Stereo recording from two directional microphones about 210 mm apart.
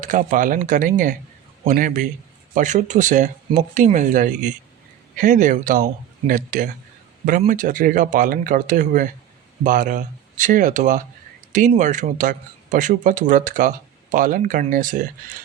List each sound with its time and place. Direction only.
0.0 s a man's voice: 35° right (ahead or behind)